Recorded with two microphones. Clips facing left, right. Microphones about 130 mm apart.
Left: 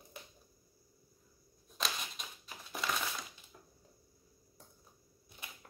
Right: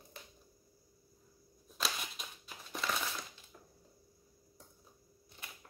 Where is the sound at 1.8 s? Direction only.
Centre (ahead or behind).